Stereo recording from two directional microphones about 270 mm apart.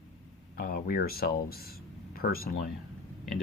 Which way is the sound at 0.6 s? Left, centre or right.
Left.